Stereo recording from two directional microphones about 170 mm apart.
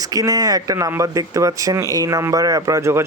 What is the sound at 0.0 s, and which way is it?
Speech, 20° right (ahead or behind).